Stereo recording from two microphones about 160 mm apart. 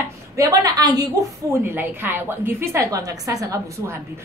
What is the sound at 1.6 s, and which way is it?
A woman's voice, 10° right (ahead or behind).